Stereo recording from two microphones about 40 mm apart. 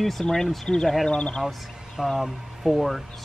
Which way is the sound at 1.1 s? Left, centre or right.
Left.